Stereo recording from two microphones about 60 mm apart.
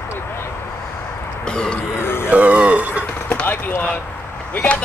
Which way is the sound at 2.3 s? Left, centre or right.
Right.